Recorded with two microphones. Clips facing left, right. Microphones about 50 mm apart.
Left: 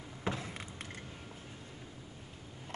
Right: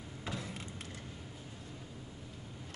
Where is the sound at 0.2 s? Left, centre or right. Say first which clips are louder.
Left 4 dB; left.